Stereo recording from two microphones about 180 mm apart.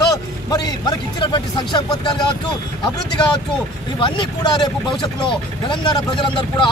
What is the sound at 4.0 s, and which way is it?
A man's voice, 25° left (ahead or behind).